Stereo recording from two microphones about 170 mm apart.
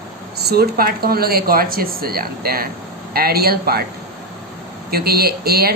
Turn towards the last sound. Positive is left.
turn(degrees=-65)  # may be behind; listen again after turning